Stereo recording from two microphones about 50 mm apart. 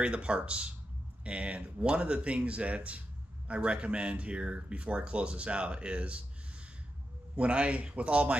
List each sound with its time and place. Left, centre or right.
0.0 s speech: right
7.3 s speech: right